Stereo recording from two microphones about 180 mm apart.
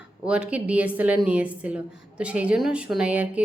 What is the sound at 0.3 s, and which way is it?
A woman's voice, 5° right (ahead or behind).